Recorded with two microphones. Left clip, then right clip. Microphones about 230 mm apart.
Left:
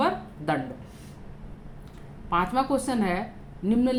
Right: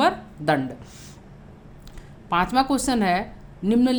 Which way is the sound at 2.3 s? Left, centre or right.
Right.